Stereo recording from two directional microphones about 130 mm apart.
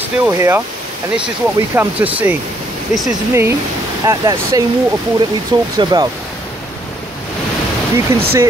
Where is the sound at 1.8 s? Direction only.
10° right (ahead or behind).